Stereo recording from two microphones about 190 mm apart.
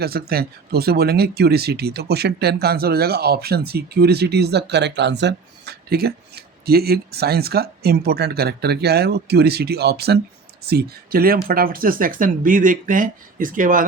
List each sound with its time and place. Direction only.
0.0 s speech: 55° right (ahead or behind)